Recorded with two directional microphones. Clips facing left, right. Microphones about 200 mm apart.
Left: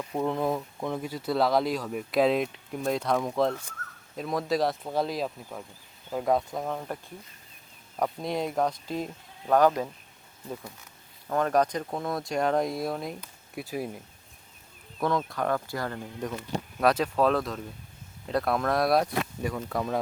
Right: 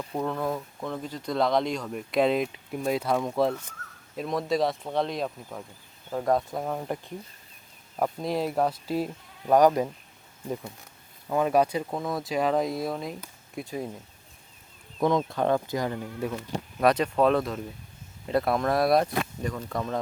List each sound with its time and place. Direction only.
0.0 s a sound: 5° left (ahead or behind)
0.3 s speech: 20° left (ahead or behind); by 9.9 s 15° right (ahead or behind)
11.3 s speech: 10° right (ahead or behind)
15.2 s speech: 25° right (ahead or behind)
16.8 s speech: centre (ahead or behind)